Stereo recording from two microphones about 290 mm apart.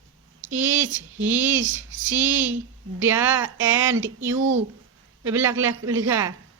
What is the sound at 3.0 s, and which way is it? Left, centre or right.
Speech, centre.